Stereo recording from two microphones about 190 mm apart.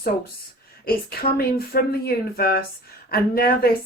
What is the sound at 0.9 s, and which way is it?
Speech, 50° left (ahead or behind).